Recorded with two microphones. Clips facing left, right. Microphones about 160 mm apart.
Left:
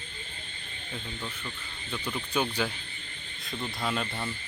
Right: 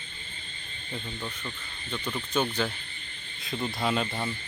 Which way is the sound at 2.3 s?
10° left (ahead or behind).